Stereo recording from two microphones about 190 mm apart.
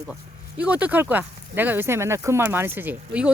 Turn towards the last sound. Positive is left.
turn(degrees=-5)  # may be behind; listen again after turning